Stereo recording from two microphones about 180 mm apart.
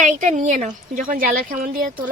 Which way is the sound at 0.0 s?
45° right (ahead or behind).